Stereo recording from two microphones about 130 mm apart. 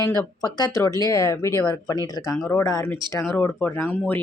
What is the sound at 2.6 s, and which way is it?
Speech, 25° left (ahead or behind).